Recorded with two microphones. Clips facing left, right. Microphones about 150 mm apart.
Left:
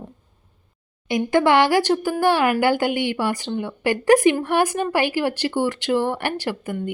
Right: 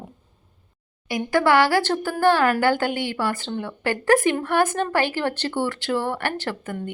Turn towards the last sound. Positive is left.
turn(degrees=15)  # may be behind; listen again after turning